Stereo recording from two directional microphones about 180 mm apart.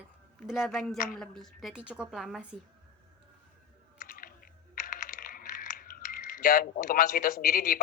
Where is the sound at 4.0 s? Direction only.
50° left (ahead or behind).